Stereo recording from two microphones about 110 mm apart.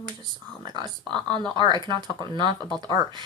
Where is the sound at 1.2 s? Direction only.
5° left (ahead or behind).